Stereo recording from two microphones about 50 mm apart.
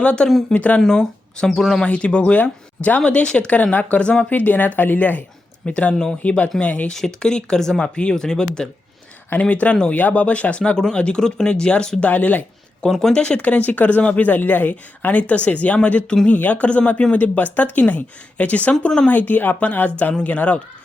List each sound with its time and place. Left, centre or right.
0.0 s speech: left
0.8 s speech: centre
1.8 s speech: left
2.4 s speech: left
3.0 s speech: left
5.6 s speech: left
6.8 s speech: centre
9.3 s speech: left
12.0 s speech: left
12.8 s speech: centre
13.1 s speech: centre
13.6 s speech: left
19.1 s speech: left